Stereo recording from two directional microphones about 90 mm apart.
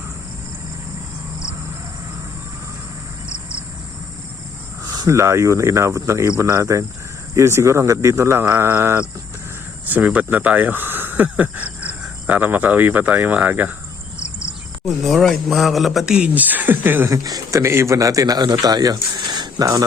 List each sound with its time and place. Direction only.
4.9 s speech: 35° right (ahead or behind); by 13.7 s 20° right (ahead or behind)
14.8 s speech: 5° left (ahead or behind); by 17.1 s 20° right (ahead or behind)
17.1 s speech: 40° right (ahead or behind)
17.6 s speech: 30° right (ahead or behind)